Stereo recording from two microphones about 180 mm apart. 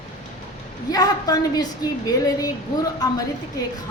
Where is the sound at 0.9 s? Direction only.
20° left (ahead or behind).